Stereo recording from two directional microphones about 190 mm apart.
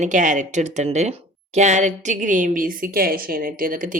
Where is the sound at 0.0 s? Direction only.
40° right (ahead or behind).